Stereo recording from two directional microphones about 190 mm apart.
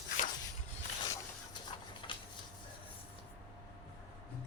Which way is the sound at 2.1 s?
25° left (ahead or behind).